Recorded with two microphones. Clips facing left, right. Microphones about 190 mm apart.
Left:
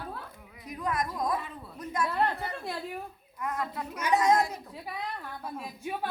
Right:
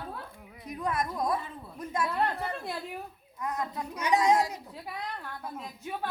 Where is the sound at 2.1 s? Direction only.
Centre (ahead or behind).